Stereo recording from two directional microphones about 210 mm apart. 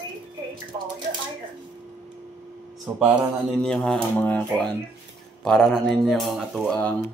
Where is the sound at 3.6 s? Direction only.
Centre (ahead or behind).